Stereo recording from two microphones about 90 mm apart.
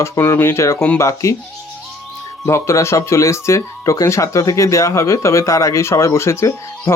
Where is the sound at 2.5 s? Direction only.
30° left (ahead or behind).